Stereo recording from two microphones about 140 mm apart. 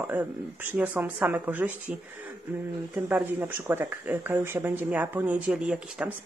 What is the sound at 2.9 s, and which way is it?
Speech, 10° right (ahead or behind).